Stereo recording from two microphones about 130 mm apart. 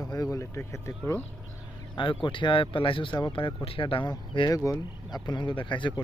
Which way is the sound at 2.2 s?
40° left (ahead or behind).